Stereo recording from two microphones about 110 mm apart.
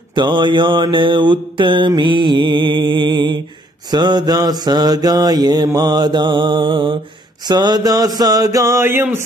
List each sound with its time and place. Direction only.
0.1 s mantra: 45° right (ahead or behind)
7.4 s mantra: 40° right (ahead or behind); by 9.2 s 20° right (ahead or behind)